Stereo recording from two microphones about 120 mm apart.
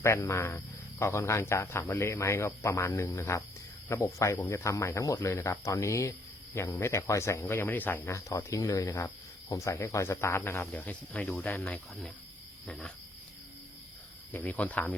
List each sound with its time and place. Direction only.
0.0 s speech: 25° left (ahead or behind); by 12.1 s 5° left (ahead or behind)
12.6 s cricket: 5° left (ahead or behind)
14.3 s speech: 15° left (ahead or behind)